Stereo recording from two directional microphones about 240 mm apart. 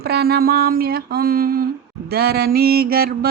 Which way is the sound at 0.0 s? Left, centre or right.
Right.